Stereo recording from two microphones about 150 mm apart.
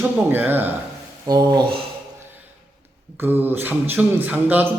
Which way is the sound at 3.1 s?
15° right (ahead or behind).